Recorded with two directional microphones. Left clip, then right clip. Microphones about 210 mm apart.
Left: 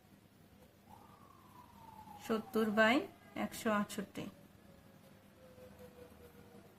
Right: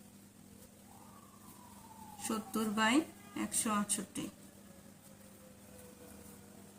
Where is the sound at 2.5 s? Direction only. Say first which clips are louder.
Left 1 dB; 45° left (ahead or behind).